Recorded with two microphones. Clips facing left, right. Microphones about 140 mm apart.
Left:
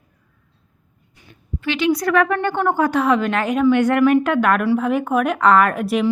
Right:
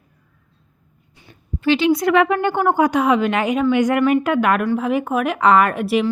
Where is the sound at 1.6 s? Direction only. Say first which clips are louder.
Right 3 dB; 30° right (ahead or behind).